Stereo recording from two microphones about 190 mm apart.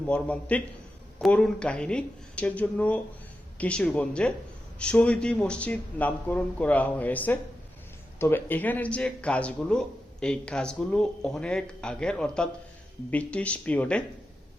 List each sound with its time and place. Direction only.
0.0 s speech: 5° left (ahead or behind)